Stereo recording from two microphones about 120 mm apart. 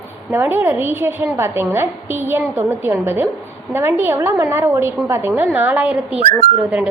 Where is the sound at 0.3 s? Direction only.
15° right (ahead or behind).